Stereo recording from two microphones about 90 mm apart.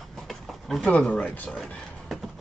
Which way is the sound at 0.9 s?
10° left (ahead or behind).